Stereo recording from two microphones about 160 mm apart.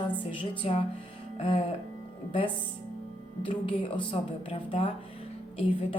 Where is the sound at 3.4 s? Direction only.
30° left (ahead or behind).